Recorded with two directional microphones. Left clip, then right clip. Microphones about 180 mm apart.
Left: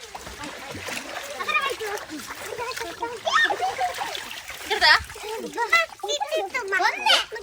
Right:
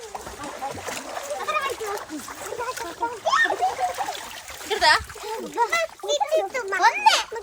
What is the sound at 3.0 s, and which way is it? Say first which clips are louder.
Speech: right 5 dB; 30° right (ahead or behind).